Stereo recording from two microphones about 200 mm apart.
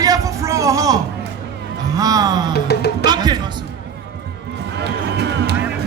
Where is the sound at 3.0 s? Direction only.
20° right (ahead or behind).